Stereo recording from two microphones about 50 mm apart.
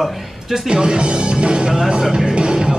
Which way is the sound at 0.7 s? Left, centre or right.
Centre.